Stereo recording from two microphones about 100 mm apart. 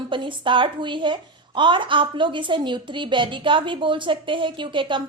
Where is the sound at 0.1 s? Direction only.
55° right (ahead or behind).